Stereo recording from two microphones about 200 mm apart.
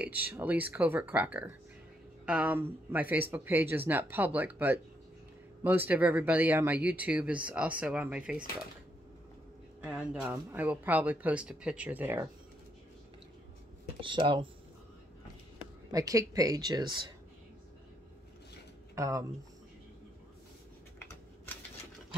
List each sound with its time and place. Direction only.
0.0 s speech: 10° right (ahead or behind)
9.8 s speech: 5° right (ahead or behind)
13.9 s speech: 25° right (ahead or behind)
15.9 s speech: 15° right (ahead or behind)
18.9 s speech: 15° right (ahead or behind)